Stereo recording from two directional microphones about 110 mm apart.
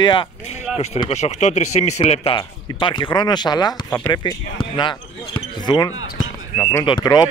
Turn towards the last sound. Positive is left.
turn(degrees=40)  # may be behind; listen again after turning